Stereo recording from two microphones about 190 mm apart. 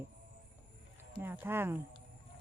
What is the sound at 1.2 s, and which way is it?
Speech, 10° right (ahead or behind).